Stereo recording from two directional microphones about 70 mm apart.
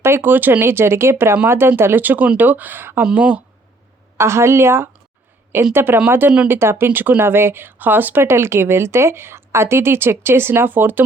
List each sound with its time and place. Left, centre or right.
0.0 s speech: right
3.0 s speech: centre
4.2 s speech: right